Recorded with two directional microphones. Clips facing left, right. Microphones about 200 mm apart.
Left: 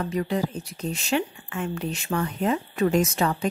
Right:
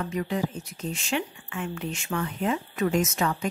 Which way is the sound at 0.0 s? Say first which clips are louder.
Left 2 dB; 35° left (ahead or behind).